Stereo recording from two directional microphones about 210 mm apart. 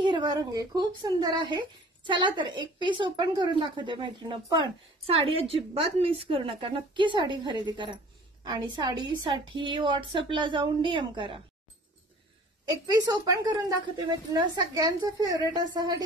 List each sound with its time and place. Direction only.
0.0 s speech: 20° right (ahead or behind)
12.6 s speech: 15° right (ahead or behind)